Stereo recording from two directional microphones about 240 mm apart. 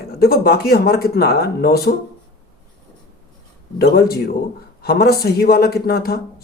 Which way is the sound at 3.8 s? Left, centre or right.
Left.